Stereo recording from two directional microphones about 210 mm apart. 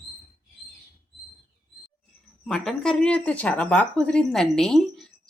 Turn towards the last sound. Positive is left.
turn(degrees=0)  # may be behind; listen again after turning